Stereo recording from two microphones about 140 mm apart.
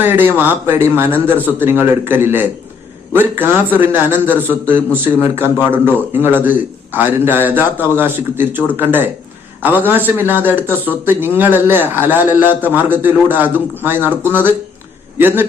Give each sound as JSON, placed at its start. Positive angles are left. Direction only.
{"t": 0.0, "sound": "a man's voice", "side_deg": -15}